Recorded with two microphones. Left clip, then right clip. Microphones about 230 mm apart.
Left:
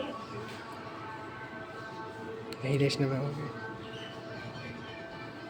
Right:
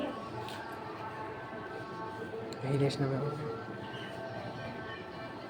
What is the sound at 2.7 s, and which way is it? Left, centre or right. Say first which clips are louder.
Speech: left 3 dB; left.